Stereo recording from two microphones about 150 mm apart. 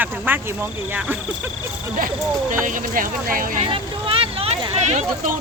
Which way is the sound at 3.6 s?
35° right (ahead or behind).